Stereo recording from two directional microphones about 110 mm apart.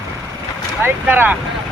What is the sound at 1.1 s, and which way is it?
Speech, 20° right (ahead or behind).